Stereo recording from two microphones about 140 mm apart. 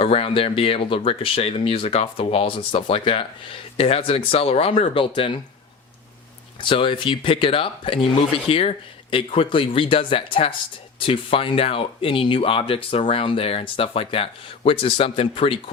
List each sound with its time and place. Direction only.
0.0 s speech: 40° left (ahead or behind)
6.6 s speech: 35° left (ahead or behind)